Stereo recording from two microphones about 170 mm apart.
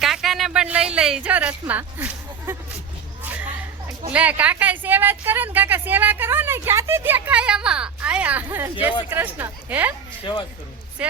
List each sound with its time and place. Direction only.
0.0 s speech: centre (ahead or behind)
4.1 s speech: 10° right (ahead or behind)
10.3 s speech: 25° left (ahead or behind)
11.0 s speech: 5° right (ahead or behind)